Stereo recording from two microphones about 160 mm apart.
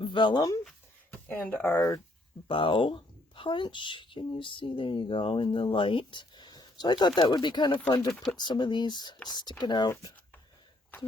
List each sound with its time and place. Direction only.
0.0 s speech: 30° left (ahead or behind)
1.3 s speech: 10° left (ahead or behind)
2.5 s a woman's voice: 35° left (ahead or behind)
10.9 s speech: 15° left (ahead or behind)